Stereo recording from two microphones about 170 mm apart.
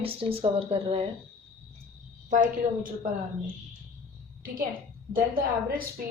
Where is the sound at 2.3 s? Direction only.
50° right (ahead or behind).